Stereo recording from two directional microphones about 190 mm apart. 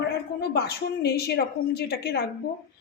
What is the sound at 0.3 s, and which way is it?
A woman's voice, 55° left (ahead or behind).